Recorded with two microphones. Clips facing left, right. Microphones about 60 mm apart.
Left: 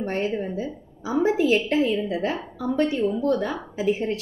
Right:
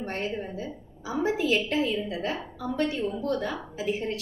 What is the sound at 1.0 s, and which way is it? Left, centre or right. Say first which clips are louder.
A woman's voice: left 6 dB; left.